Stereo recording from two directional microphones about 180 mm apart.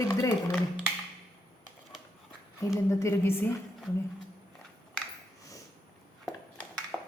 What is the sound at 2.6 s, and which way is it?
Speech, 15° left (ahead or behind).